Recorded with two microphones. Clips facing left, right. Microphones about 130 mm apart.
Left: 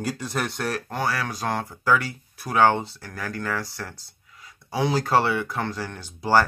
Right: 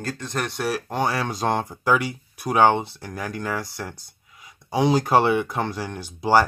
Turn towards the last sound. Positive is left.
turn(degrees=-15)  # may be behind; listen again after turning